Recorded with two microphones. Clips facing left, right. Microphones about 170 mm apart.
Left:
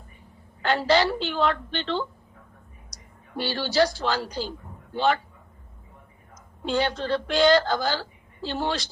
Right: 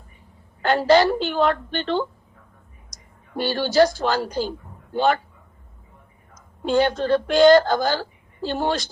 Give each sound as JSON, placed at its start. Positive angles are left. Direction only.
{"t": 0.6, "sound": "a woman's voice", "side_deg": -50}
{"t": 6.7, "sound": "a woman's voice", "side_deg": -45}